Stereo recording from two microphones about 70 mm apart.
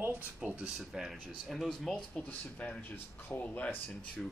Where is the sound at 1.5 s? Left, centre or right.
Centre.